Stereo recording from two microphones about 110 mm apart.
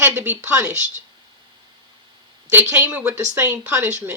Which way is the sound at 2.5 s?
20° right (ahead or behind).